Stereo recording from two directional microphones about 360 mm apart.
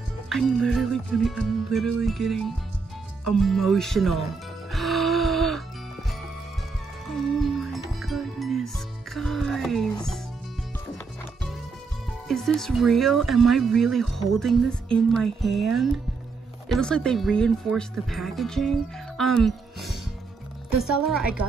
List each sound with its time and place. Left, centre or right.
0.3 s speech: centre
4.6 s music: centre
7.6 s music: centre
12.3 s speech: centre